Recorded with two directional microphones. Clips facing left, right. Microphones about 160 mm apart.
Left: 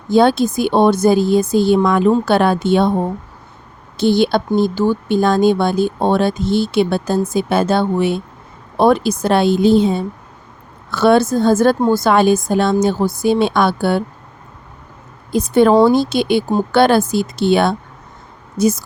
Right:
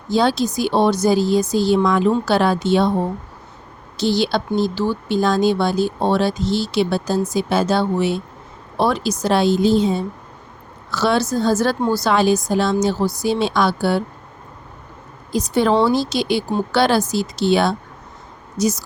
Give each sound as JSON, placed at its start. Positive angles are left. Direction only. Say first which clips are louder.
{"t": 0.1, "sound": "speech", "louder": "left 5 dB", "side_deg": 55}
{"t": 3.9, "sound": "speech", "louder": "left 5 dB", "side_deg": 55}
{"t": 15.3, "sound": "speech", "louder": "left 5 dB", "side_deg": 55}